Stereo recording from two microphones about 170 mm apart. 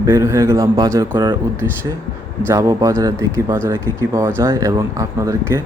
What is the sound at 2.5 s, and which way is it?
Speech, 20° right (ahead or behind).